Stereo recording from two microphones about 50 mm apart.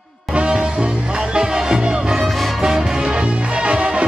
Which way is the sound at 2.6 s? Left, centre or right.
Centre.